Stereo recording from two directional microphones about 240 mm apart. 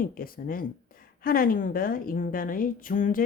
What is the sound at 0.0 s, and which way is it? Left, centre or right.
A woman's voice, left.